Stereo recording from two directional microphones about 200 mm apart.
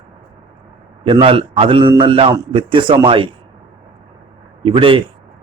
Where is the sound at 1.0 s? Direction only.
25° right (ahead or behind).